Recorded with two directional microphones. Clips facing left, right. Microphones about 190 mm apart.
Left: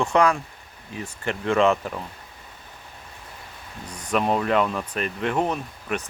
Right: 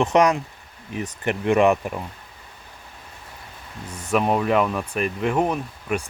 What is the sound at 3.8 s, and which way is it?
Speech, 5° right (ahead or behind).